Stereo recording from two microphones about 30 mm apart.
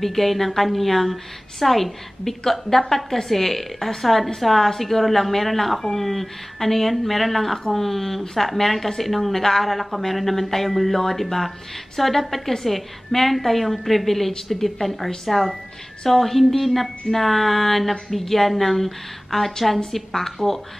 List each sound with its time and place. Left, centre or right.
0.0 s a woman's voice: centre